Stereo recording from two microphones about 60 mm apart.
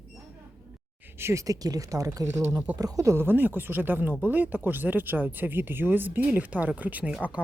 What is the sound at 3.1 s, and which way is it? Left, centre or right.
Speech, right.